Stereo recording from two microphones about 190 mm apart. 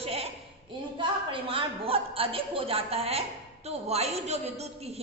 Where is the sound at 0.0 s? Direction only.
30° right (ahead or behind).